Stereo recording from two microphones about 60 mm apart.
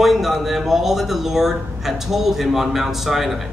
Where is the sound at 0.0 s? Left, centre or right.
Centre.